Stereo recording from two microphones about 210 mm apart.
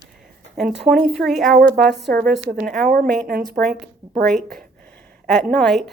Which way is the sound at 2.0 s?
45° right (ahead or behind).